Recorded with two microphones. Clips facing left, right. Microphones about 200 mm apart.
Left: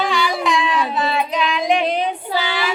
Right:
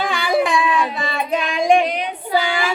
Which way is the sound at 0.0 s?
50° right (ahead or behind).